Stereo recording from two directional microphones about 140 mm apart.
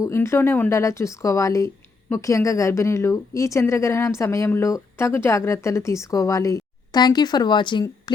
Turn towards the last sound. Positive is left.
turn(degrees=35)  # may be behind; listen again after turning